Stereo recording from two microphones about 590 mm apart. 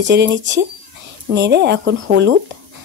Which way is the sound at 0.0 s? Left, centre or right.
Centre.